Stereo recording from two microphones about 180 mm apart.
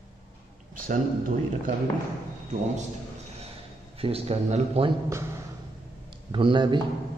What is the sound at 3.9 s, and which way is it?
A man's voice, 30° right (ahead or behind).